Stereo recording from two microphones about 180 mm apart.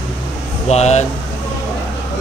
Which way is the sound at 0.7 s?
40° left (ahead or behind).